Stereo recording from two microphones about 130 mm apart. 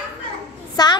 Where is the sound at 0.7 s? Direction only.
30° left (ahead or behind).